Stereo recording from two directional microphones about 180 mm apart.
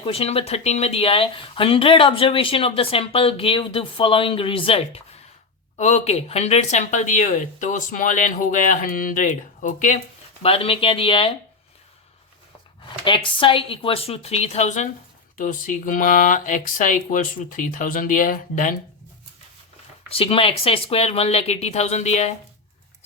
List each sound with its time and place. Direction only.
0.0 s speech: 30° left (ahead or behind)
5.7 s speech: 40° left (ahead or behind)
10.4 s speech: 30° left (ahead or behind)
13.1 s speech: 25° left (ahead or behind); by 18.8 s 50° left (ahead or behind)
20.1 s speech: 30° left (ahead or behind)